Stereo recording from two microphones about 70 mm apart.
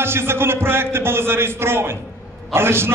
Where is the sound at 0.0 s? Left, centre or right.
Right.